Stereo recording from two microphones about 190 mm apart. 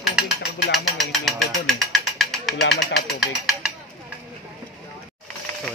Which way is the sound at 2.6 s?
60° left (ahead or behind).